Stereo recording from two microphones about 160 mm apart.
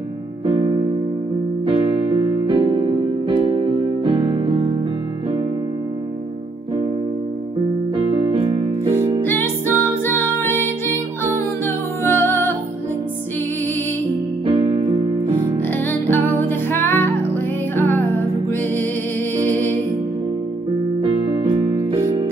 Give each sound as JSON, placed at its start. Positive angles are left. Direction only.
{"t": 1.7, "sound": "music", "side_deg": -35}
{"t": 9.2, "sound": "music", "side_deg": 15}
{"t": 14.4, "sound": "keyboard", "side_deg": -30}
{"t": 15.9, "sound": "music", "side_deg": 15}
{"t": 21.0, "sound": "music", "side_deg": -35}